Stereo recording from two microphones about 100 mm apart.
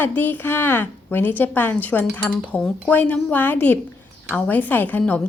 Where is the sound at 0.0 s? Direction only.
20° left (ahead or behind).